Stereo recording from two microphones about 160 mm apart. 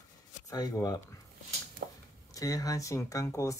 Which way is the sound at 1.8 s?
90° right.